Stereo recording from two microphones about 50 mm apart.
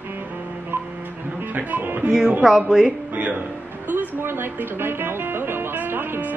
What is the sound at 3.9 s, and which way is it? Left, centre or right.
Music, right.